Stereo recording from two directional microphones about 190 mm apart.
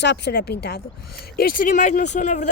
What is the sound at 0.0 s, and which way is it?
A woman's voice, 65° left (ahead or behind).